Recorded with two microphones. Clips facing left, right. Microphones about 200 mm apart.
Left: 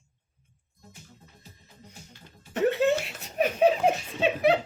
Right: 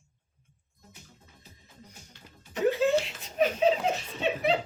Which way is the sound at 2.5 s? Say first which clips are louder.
Left 1 dB; 65° left (ahead or behind).